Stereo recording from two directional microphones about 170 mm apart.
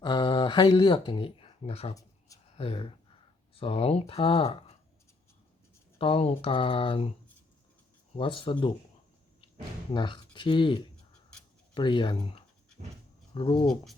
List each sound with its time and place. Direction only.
0.0 s speech: 25° left (ahead or behind)
6.0 s speech: 35° left (ahead or behind)
8.1 s speech: 30° left (ahead or behind)
9.9 s speech: 30° left (ahead or behind)